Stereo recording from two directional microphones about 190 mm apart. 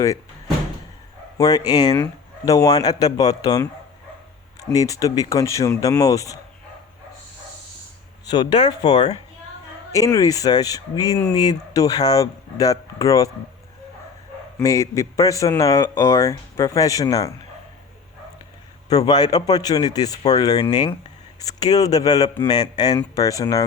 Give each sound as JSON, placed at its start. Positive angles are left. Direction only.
{"t": 1.4, "sound": "speech", "side_deg": 20}
{"t": 8.3, "sound": "speech", "side_deg": 20}
{"t": 14.6, "sound": "speech", "side_deg": 15}
{"t": 18.9, "sound": "speech", "side_deg": 20}